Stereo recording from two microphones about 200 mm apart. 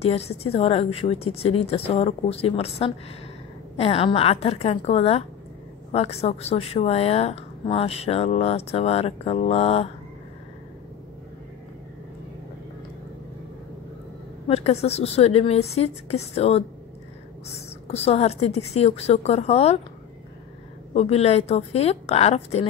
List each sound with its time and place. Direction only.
0.0 s a woman's voice: 30° left (ahead or behind)
14.5 s a woman's voice: 30° left (ahead or behind)
17.8 s a woman's voice: 30° left (ahead or behind)
20.9 s a woman's voice: 30° left (ahead or behind)